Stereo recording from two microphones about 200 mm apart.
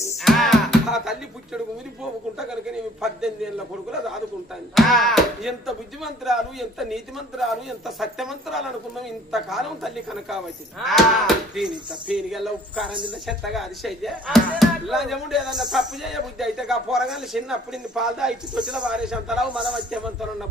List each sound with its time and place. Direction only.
0.2 s music: centre (ahead or behind)
3.0 s speech: 5° right (ahead or behind)
4.7 s speech: centre (ahead or behind)